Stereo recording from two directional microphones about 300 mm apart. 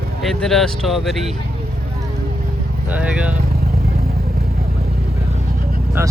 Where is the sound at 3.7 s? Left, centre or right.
Right.